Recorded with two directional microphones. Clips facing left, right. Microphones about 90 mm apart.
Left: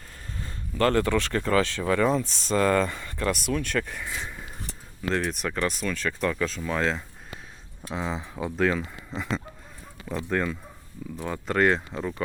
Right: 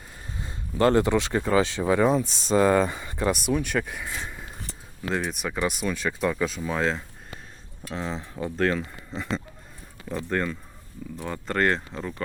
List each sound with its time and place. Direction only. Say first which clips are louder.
0.3 s speech: right 2 dB; 20° right (ahead or behind); by 12.2 s 5° left (ahead or behind)